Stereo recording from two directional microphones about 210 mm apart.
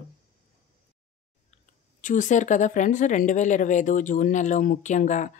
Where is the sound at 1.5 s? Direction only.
35° left (ahead or behind).